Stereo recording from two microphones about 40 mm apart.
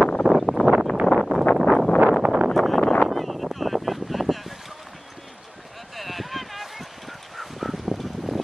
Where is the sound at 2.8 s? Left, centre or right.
Left.